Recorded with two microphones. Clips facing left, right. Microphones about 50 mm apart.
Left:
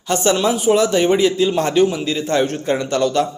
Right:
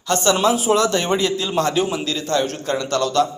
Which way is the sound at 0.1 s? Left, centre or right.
Left.